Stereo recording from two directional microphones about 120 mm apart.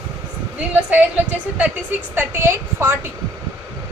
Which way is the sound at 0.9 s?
15° right (ahead or behind).